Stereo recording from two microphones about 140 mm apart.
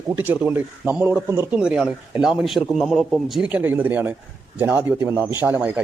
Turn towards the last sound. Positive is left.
turn(degrees=-15)  # may be behind; listen again after turning